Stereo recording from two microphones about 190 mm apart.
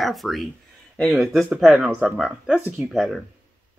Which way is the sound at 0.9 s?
Centre (ahead or behind).